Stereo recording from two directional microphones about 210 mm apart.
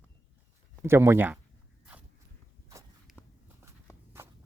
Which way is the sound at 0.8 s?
10° right (ahead or behind).